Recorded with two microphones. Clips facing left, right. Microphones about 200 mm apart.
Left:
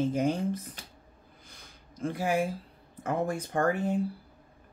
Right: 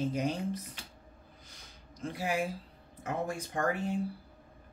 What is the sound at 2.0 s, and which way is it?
Speech, 50° left (ahead or behind).